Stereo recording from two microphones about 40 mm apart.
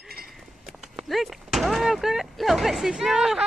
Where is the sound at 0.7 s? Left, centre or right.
Centre.